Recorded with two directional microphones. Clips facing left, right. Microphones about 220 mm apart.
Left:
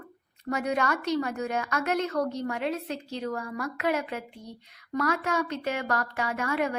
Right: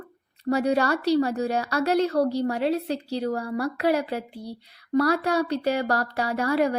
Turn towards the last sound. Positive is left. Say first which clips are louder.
# right 6 dB
turn(degrees=-35)  # may be behind; listen again after turning